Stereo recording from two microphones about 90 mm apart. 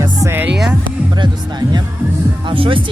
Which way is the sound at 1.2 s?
50° right (ahead or behind).